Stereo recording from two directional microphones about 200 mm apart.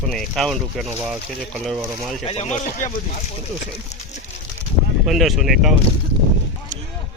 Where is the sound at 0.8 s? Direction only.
25° right (ahead or behind).